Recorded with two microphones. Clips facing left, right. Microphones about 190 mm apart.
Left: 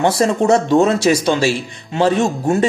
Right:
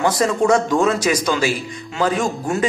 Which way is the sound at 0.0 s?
25° left (ahead or behind).